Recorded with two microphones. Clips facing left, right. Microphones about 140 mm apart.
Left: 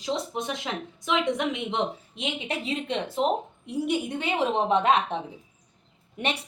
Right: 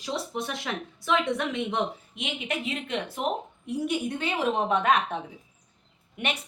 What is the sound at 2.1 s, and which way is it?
A woman's voice, 30° left (ahead or behind).